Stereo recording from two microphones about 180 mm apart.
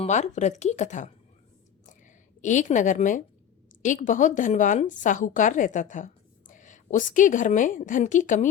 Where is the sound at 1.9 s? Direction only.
45° left (ahead or behind).